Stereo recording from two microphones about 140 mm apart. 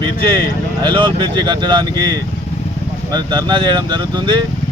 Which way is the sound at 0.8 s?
35° right (ahead or behind).